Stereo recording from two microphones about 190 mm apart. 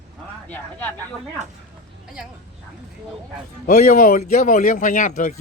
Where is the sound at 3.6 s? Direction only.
45° left (ahead or behind).